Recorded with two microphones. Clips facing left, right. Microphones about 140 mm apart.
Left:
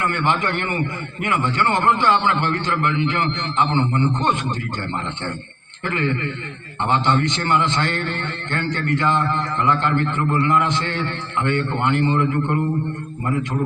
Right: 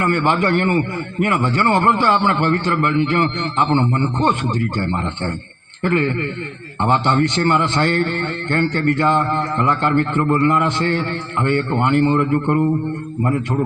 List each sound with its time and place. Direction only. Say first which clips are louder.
0.0 s a man's voice: right 4 dB; 50° right (ahead or behind)